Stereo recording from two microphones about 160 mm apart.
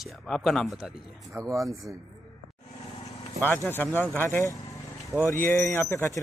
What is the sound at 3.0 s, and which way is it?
Vehicle, 10° left (ahead or behind).